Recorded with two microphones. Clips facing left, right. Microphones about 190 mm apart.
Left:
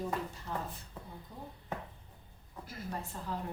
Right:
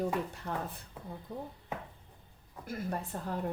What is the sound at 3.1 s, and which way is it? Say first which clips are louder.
Speech: right 5 dB; 55° right (ahead or behind).